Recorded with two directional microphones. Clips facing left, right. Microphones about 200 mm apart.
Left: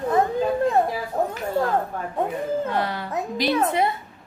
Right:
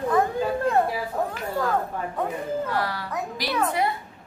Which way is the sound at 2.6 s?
20° left (ahead or behind).